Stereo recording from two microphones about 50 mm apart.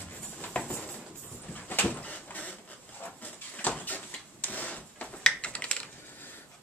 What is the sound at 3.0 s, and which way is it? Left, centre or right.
Drawer open or close, left.